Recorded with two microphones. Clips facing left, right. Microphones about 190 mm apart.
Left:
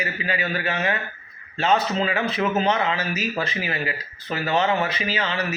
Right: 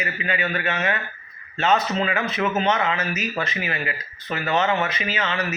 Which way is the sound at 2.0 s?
30° left (ahead or behind).